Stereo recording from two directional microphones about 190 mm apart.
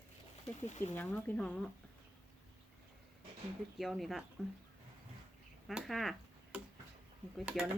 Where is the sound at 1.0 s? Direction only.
10° left (ahead or behind).